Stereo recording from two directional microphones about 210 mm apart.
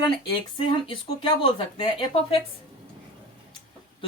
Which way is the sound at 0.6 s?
25° left (ahead or behind).